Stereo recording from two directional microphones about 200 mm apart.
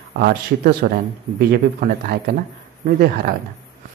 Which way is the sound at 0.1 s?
50° right (ahead or behind).